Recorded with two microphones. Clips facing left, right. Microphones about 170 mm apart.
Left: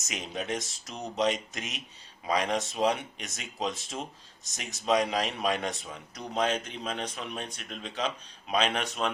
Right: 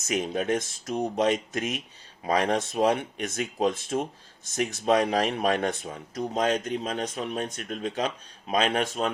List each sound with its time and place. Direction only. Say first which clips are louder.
0.0 s speech: right 9 dB; 55° right (ahead or behind)